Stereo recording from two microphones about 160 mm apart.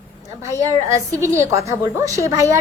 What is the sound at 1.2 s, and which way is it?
A woman's voice, 15° right (ahead or behind).